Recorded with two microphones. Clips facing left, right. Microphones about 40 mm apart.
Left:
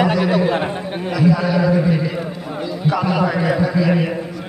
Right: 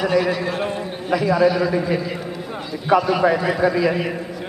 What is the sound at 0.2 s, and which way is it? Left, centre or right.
Speech, left.